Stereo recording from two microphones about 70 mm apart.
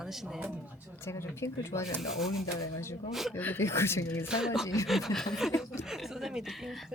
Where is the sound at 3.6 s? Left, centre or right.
Left.